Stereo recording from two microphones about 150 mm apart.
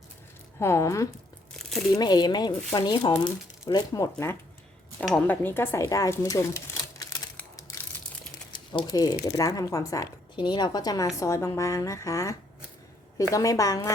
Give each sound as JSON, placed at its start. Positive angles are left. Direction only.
{"t": 0.6, "sound": "a woman's voice", "side_deg": 20}
{"t": 8.5, "sound": "a sound", "side_deg": 30}
{"t": 9.2, "sound": "a woman's voice", "side_deg": 20}